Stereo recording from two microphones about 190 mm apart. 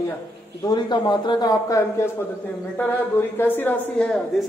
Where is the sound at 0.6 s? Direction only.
25° left (ahead or behind).